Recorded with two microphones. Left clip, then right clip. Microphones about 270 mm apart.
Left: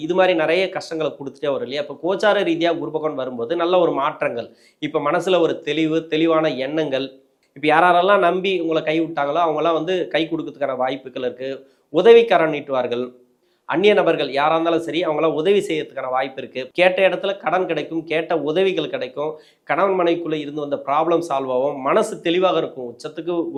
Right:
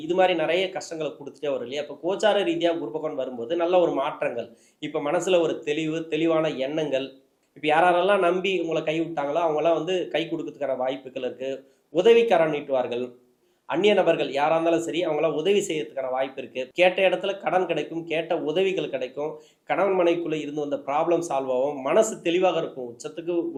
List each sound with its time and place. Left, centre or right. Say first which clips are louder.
0.0 s speech: left 5 dB; left